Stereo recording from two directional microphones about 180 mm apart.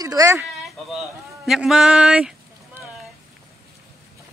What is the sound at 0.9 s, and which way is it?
Speech, centre (ahead or behind).